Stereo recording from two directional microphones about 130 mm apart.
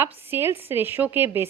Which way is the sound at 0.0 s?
15° right (ahead or behind).